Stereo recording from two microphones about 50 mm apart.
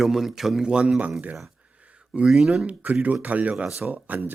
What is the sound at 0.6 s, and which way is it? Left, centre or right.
Speech, centre.